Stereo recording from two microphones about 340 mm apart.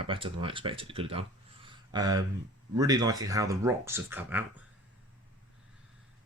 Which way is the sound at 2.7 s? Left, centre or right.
Centre.